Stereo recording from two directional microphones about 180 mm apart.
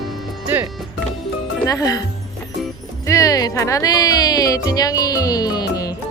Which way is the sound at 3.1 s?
20° left (ahead or behind).